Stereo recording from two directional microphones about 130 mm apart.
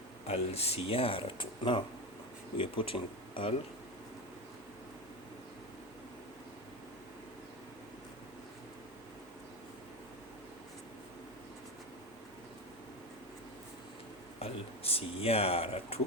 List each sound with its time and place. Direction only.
0.3 s speech: 50° left (ahead or behind)
14.3 s speech: 50° left (ahead or behind)